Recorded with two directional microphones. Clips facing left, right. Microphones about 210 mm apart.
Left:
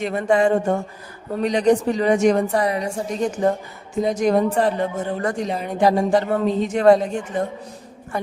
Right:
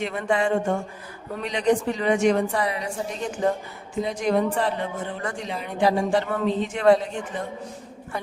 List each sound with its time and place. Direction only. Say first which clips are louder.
0.0 s a woman's voice: left 6 dB; 40° left (ahead or behind)